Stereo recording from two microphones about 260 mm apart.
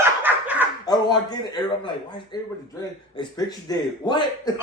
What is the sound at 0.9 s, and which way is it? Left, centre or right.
A man's voice, centre.